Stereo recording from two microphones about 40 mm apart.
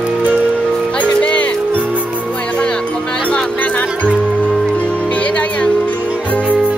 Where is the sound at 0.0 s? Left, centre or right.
Right.